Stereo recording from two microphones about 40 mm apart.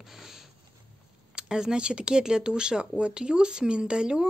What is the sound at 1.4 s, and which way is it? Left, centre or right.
Speech, centre.